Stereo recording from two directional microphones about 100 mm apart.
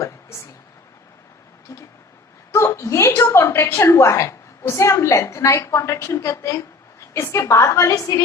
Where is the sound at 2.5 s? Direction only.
30° left (ahead or behind).